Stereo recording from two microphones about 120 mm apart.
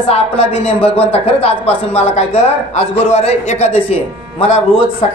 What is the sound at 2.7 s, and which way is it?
Speech, 60° left (ahead or behind).